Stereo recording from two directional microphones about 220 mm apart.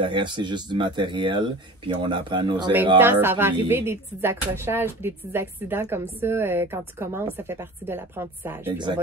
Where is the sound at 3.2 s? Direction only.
10° right (ahead or behind).